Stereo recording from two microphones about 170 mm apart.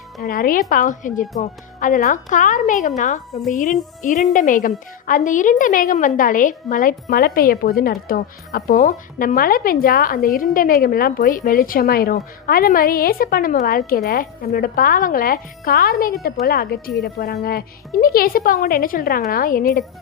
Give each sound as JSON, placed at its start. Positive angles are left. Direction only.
{"t": 0.2, "sound": "a woman's voice", "side_deg": 60}